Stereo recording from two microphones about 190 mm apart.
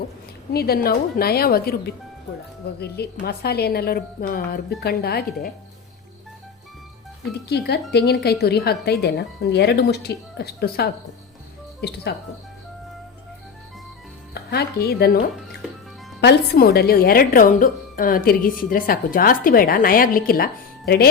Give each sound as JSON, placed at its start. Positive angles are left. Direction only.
{"t": 0.5, "sound": "a woman's voice", "side_deg": 55}
{"t": 7.5, "sound": "speech", "side_deg": 60}
{"t": 14.3, "sound": "speech", "side_deg": 55}
{"t": 16.2, "sound": "a woman's voice", "side_deg": 55}